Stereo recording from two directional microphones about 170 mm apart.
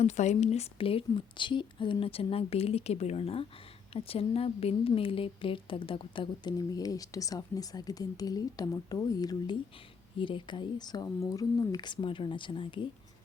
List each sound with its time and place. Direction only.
0.0 s a woman's voice: 45° left (ahead or behind)